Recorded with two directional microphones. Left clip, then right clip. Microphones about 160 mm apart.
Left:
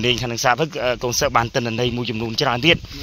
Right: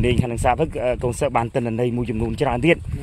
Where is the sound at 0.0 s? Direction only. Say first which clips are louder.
Left 2 dB; 20° right (ahead or behind).